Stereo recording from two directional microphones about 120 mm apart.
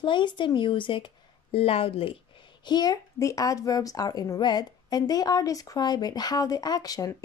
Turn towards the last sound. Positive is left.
turn(degrees=30)  # may be behind; listen again after turning